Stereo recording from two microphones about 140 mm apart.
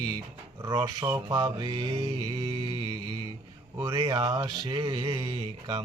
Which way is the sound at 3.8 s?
25° right (ahead or behind).